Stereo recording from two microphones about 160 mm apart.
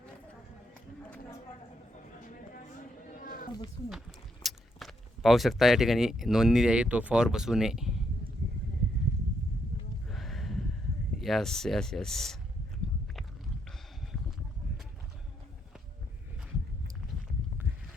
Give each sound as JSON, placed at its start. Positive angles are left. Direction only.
{"t": 3.2, "sound": "a sound", "side_deg": 65}
{"t": 4.4, "sound": "speech", "side_deg": 0}
{"t": 10.1, "sound": "music", "side_deg": 0}
{"t": 11.2, "sound": "speech", "side_deg": 0}